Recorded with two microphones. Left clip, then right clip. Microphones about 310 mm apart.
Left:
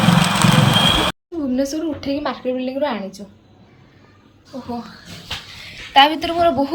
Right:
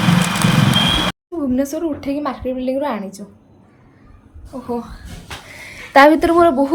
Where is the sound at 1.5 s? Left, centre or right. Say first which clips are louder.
Even; centre.